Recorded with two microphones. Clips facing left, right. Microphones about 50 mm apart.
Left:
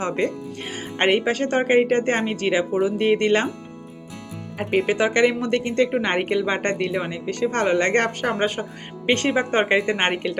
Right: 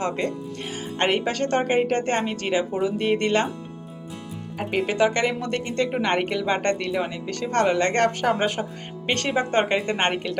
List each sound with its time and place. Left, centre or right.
0.9 s a woman's voice: centre
4.9 s a woman's voice: left
6.0 s a woman's voice: centre
8.4 s speech: centre
9.0 s a woman's voice: left